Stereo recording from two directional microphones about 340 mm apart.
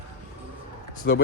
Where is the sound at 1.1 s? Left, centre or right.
Left.